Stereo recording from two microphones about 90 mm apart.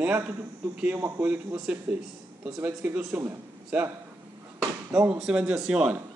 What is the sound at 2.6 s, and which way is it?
Speech, 20° right (ahead or behind).